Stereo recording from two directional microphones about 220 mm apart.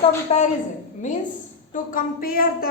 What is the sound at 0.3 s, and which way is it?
Speech, 30° left (ahead or behind).